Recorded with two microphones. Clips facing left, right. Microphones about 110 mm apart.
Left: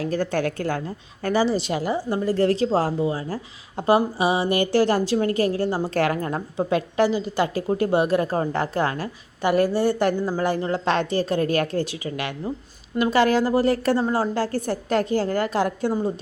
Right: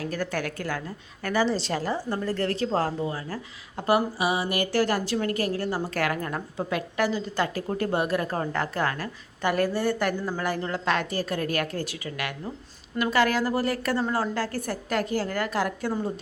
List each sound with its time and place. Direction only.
0.1 s a woman's voice: 25° left (ahead or behind)
1.2 s speech: 15° left (ahead or behind)
1.5 s a woman's voice: 5° left (ahead or behind)